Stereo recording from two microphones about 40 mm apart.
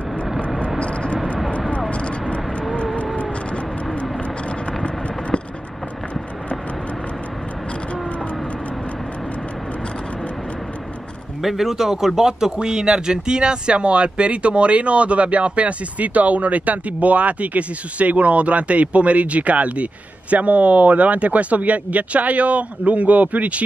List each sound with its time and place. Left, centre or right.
0.7 s vehicle: left
11.4 s speech: centre; by 23.6 s right